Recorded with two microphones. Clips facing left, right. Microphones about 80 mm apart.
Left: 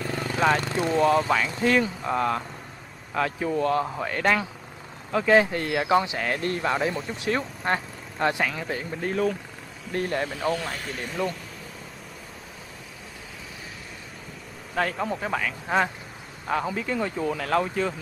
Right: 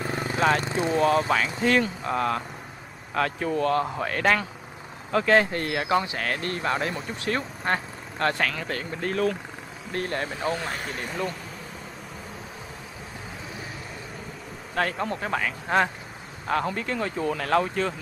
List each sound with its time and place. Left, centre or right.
0.0 s vehicle: right
0.4 s speech: centre
0.7 s speech: centre
0.9 s speech: centre
5.7 s speech: centre
6.9 s speech: centre
7.2 s speech: centre
10.2 s speech: centre
11.0 s speech: centre
14.8 s speech: centre